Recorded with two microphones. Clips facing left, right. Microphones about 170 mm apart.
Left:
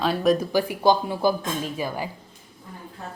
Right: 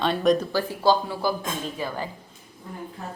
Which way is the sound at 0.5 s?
15° left (ahead or behind).